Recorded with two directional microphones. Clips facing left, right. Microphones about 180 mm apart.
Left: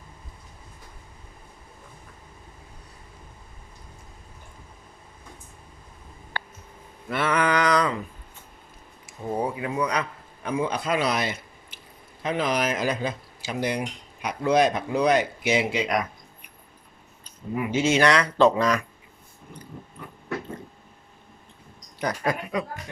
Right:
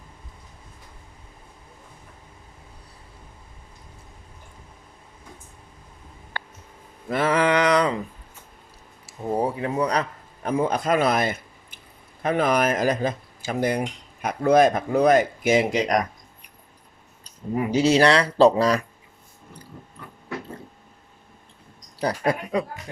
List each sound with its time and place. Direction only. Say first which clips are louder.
7.1 s a sound: right 3 dB; 30° right (ahead or behind)
9.3 s speech: right 3 dB; 35° right (ahead or behind)
17.2 s speech: right 3 dB; 35° right (ahead or behind)
21.9 s speech: right 3 dB; 30° right (ahead or behind)